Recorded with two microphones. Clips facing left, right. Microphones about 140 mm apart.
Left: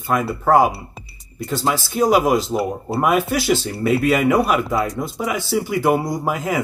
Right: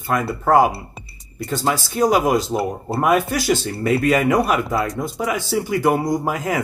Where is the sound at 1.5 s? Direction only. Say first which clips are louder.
Even; 45° right (ahead or behind).